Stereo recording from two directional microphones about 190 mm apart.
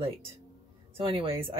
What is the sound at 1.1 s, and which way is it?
Speech, 30° right (ahead or behind).